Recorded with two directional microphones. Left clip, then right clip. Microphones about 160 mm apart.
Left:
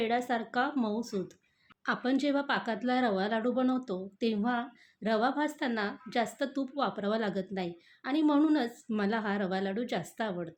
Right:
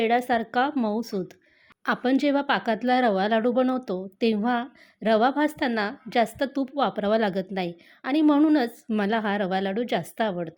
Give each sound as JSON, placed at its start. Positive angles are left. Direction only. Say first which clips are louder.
{"t": 0.0, "sound": "speech", "louder": "right 8 dB", "side_deg": -50}